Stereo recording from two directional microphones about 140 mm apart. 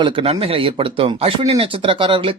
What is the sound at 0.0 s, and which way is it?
Speech, 40° right (ahead or behind).